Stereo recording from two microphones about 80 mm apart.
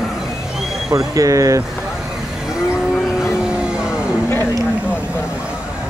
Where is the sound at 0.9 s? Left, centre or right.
Right.